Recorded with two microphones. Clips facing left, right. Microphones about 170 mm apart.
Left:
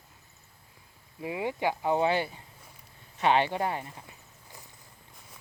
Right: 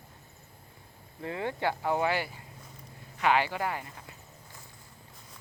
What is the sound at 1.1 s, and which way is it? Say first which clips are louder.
Speech: left 2 dB; 15° left (ahead or behind).